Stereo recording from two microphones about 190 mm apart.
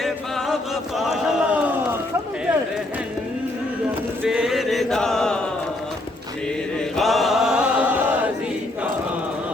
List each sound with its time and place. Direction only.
0.0 s chant: centre (ahead or behind)
0.9 s a sound: centre (ahead or behind)
4.2 s chant: centre (ahead or behind)
6.7 s chant: centre (ahead or behind)